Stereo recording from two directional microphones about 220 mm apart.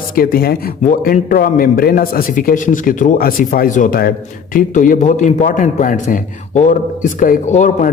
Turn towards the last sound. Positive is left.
turn(degrees=35)  # may be behind; listen again after turning